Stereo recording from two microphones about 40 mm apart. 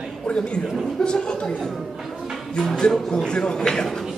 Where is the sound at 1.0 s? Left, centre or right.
Left.